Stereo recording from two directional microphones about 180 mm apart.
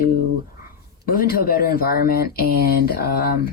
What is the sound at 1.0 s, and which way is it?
Speech, 55° left (ahead or behind).